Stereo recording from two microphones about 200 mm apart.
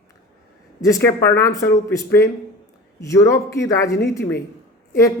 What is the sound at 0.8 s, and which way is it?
A man's voice, 15° left (ahead or behind).